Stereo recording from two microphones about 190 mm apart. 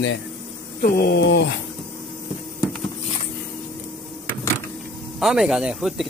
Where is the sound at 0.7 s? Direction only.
50° left (ahead or behind).